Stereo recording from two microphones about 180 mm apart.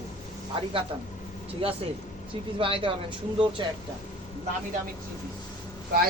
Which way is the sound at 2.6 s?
30° right (ahead or behind).